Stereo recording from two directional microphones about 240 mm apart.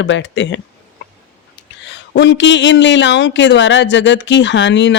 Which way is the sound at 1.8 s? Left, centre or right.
Left.